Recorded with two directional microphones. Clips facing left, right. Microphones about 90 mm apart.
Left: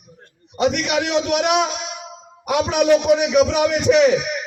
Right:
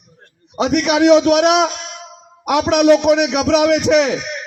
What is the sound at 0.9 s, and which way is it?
A man's voice, 85° right.